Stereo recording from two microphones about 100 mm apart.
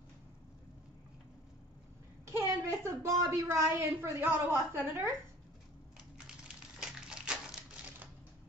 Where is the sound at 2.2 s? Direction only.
25° right (ahead or behind).